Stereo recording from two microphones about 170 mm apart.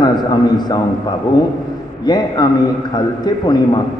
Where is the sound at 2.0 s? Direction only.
25° left (ahead or behind).